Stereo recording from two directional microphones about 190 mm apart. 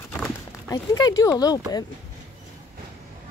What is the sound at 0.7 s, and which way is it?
A woman's voice, 20° left (ahead or behind).